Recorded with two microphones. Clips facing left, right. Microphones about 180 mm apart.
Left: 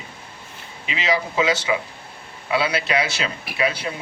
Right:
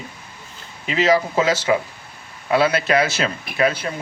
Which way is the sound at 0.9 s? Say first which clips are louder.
Right 6 dB; 45° right (ahead or behind).